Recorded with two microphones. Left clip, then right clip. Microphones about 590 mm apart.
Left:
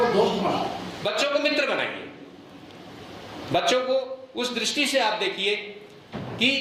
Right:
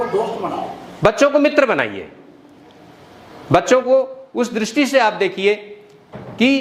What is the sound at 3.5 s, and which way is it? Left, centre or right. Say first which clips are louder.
A man's voice: right 9 dB; right.